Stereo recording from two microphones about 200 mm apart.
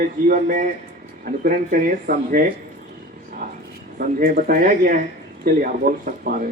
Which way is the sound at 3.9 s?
50° right (ahead or behind).